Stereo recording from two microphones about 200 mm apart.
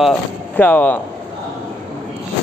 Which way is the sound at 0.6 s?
10° left (ahead or behind).